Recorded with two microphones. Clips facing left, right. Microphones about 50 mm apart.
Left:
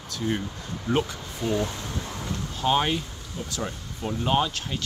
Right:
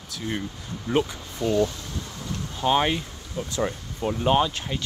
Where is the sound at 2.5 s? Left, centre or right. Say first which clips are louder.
Right 2 dB; centre.